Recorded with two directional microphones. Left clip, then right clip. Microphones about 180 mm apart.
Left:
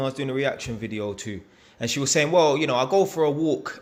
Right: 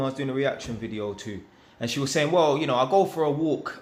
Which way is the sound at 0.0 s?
35° left (ahead or behind).